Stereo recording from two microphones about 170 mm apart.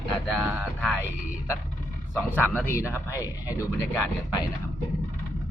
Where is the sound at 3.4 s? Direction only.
20° left (ahead or behind).